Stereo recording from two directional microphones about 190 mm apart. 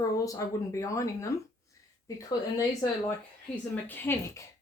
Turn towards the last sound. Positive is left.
turn(degrees=15)  # may be behind; listen again after turning